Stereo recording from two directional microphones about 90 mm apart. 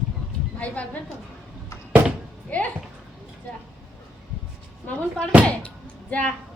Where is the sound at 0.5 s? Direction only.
15° left (ahead or behind).